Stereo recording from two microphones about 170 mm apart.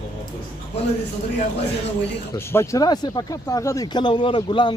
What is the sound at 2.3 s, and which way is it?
Speech, 15° left (ahead or behind).